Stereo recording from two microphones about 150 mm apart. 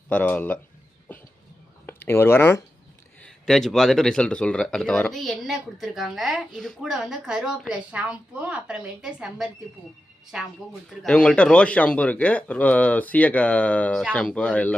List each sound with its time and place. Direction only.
0.1 s speech: 10° left (ahead or behind)
1.9 s speech: 15° left (ahead or behind)
3.2 s speech: 5° left (ahead or behind)
10.8 s speech: 5° left (ahead or behind)